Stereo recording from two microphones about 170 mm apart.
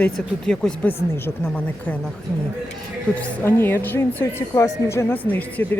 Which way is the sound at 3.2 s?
10° left (ahead or behind).